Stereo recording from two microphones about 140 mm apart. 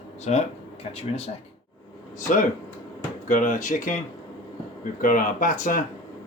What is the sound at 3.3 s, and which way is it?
Speech, 65° left (ahead or behind).